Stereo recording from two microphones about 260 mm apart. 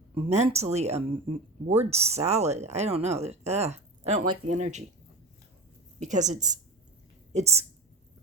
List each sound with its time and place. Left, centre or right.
0.2 s speech: right
6.0 s speech: right